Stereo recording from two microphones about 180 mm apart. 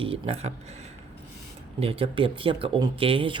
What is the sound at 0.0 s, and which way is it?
Speech, 35° right (ahead or behind).